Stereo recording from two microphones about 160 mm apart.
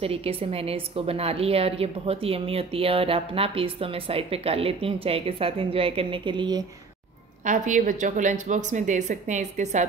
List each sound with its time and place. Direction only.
0.0 s a woman's voice: 35° right (ahead or behind)
7.4 s a woman's voice: 50° right (ahead or behind)